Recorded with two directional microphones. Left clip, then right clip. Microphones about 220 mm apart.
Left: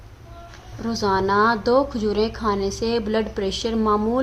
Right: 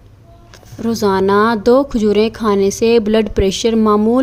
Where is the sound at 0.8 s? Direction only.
50° right (ahead or behind).